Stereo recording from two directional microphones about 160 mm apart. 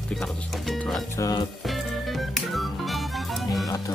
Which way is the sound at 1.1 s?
20° left (ahead or behind).